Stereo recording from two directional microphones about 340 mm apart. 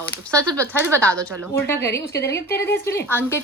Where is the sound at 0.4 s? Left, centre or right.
Centre.